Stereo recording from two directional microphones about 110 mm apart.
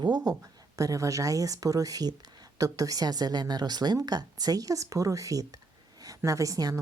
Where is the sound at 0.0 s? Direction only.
40° right (ahead or behind).